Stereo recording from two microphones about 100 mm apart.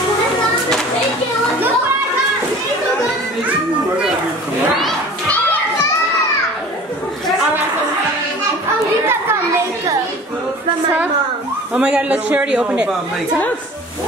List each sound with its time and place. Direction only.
9.0 s children playing: 25° right (ahead or behind)
11.7 s a woman's voice: 10° right (ahead or behind)